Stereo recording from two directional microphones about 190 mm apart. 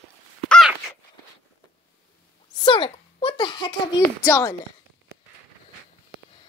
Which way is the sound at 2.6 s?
25° left (ahead or behind).